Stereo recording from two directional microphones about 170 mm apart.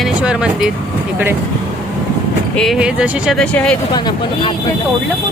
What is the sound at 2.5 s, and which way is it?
Speech, centre (ahead or behind).